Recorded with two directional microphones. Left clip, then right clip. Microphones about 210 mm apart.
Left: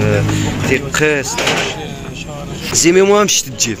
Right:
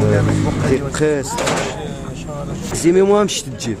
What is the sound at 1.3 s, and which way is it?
Speech, 30° left (ahead or behind).